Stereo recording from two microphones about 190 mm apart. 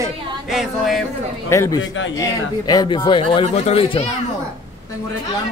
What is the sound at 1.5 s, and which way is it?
Speech, 15° left (ahead or behind).